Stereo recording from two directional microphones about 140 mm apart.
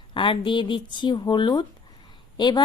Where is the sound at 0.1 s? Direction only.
35° left (ahead or behind).